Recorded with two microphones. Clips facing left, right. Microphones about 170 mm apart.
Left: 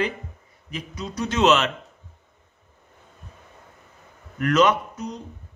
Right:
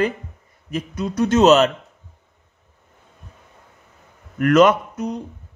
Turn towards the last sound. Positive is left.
turn(degrees=-55)  # may be behind; listen again after turning